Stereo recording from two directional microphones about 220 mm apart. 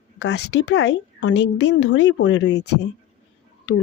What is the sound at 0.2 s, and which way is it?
A woman's voice, 50° left (ahead or behind).